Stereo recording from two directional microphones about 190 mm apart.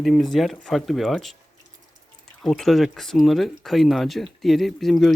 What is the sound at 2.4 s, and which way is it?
Speech, centre (ahead or behind).